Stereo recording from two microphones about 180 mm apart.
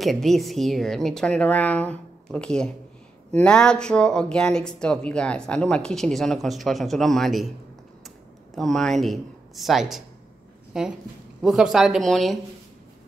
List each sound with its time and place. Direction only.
0.0 s speech: centre (ahead or behind)
8.5 s a woman's voice: centre (ahead or behind)